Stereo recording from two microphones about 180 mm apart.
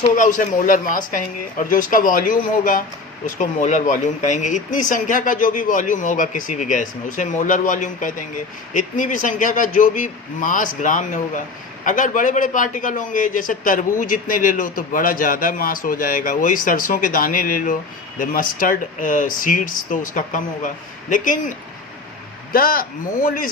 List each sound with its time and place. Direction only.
0.2 s a man's voice: 50° left (ahead or behind)
22.5 s a man's voice: 55° left (ahead or behind)